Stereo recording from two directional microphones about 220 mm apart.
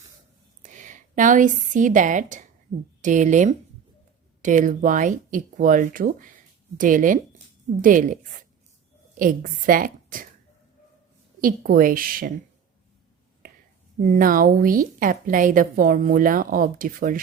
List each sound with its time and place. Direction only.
0.6 s a woman's voice: 35° right (ahead or behind)
11.3 s a woman's voice: 40° right (ahead or behind)
14.1 s a woman's voice: 40° right (ahead or behind)